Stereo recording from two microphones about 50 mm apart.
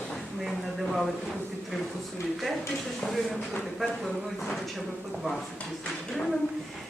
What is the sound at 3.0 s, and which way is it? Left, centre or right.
Speech, centre.